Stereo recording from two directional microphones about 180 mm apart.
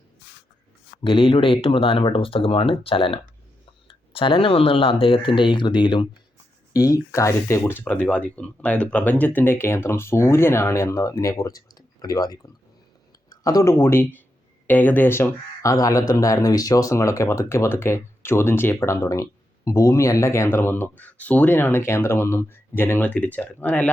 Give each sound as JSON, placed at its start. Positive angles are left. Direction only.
{"t": 1.0, "sound": "speech", "side_deg": 30}